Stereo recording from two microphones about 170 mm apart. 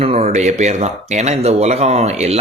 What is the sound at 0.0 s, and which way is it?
A man's voice, 40° right (ahead or behind).